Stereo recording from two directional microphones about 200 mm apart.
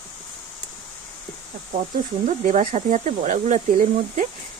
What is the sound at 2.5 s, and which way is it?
Speech, 40° right (ahead or behind).